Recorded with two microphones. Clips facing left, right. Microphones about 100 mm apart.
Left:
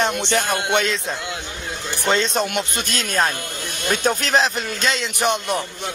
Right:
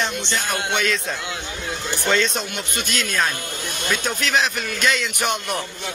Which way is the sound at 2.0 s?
25° left (ahead or behind).